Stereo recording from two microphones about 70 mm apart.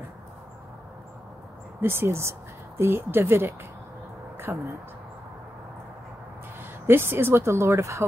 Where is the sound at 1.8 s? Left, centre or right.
Right.